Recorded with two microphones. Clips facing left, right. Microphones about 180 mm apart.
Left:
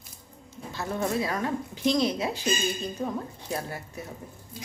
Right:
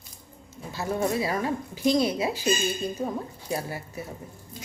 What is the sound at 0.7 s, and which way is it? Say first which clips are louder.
Speech: right 2 dB; 5° right (ahead or behind).